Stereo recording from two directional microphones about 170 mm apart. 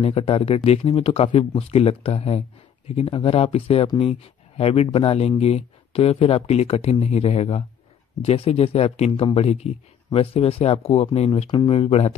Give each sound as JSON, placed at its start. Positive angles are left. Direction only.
{"t": 0.0, "sound": "speech", "side_deg": 35}